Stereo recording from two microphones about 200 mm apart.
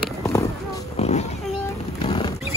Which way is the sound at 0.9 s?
35° left (ahead or behind).